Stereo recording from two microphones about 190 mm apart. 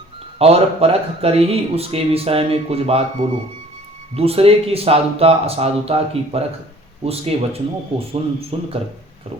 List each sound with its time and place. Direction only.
0.3 s speech: 30° right (ahead or behind)